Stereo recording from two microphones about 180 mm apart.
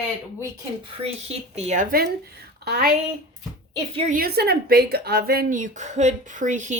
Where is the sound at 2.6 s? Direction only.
65° right (ahead or behind).